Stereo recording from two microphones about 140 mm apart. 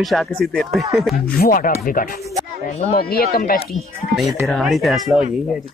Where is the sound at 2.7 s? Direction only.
50° left (ahead or behind).